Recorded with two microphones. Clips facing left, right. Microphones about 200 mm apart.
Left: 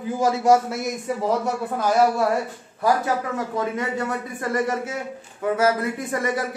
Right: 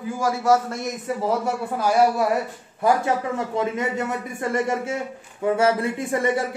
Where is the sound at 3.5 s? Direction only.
20° right (ahead or behind).